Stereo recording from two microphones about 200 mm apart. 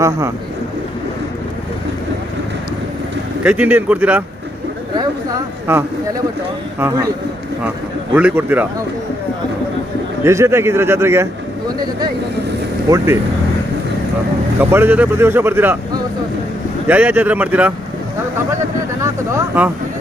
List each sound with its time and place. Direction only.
3.4 s speech: 5° right (ahead or behind)
5.7 s speech: 10° right (ahead or behind)
8.1 s speech: 10° right (ahead or behind)
10.2 s speech: 15° right (ahead or behind)
14.6 s speech: 10° right (ahead or behind)
16.8 s speech: 5° right (ahead or behind)
19.6 s speech: 5° right (ahead or behind)